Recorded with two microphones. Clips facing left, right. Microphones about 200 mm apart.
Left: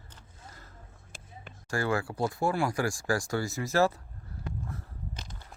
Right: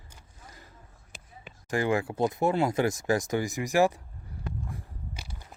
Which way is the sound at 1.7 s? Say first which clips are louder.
Right 3 dB; 20° right (ahead or behind).